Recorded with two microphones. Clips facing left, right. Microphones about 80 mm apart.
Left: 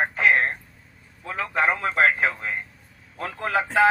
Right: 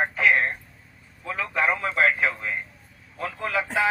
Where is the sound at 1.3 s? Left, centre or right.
Left.